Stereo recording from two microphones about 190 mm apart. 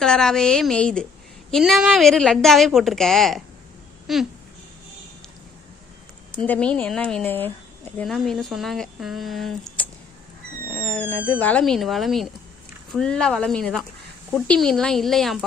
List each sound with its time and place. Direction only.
0.0 s speech: 5° left (ahead or behind)
4.0 s a sound: centre (ahead or behind)
6.4 s speech: 5° left (ahead or behind)
10.7 s cat: 10° left (ahead or behind)
11.3 s speech: 10° left (ahead or behind)